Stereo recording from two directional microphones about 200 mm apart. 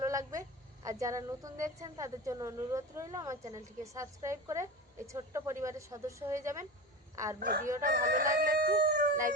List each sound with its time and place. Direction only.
0.0 s a woman's voice: 15° right (ahead or behind)
7.3 s speech: 45° right (ahead or behind)
7.8 s crowing: 50° right (ahead or behind)